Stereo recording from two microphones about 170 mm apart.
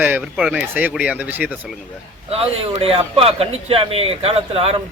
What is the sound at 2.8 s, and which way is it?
A man's voice, 35° right (ahead or behind).